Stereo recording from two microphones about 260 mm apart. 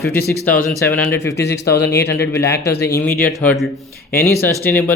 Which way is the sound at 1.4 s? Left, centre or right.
Left.